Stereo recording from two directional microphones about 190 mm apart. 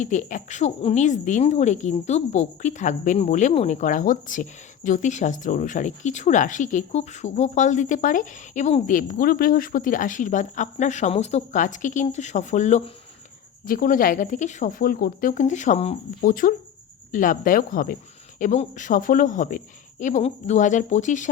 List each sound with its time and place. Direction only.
0.0 s speech: 40° left (ahead or behind)